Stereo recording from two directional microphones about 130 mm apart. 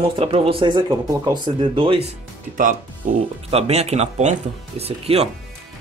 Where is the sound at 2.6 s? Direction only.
90° right.